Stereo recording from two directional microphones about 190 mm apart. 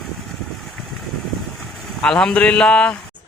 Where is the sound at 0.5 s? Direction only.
Centre (ahead or behind).